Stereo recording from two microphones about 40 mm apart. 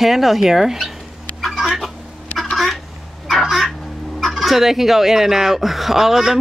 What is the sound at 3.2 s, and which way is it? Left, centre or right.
Fowl, centre.